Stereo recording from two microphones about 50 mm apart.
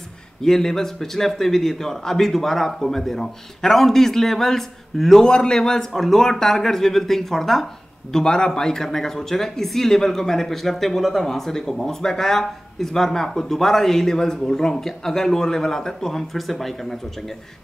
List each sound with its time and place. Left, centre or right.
0.4 s speech: centre
5.2 s speech: centre